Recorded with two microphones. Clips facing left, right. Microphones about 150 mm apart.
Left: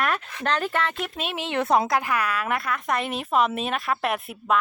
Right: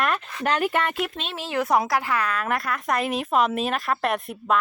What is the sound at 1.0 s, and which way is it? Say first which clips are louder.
Speech: even; 5° left (ahead or behind).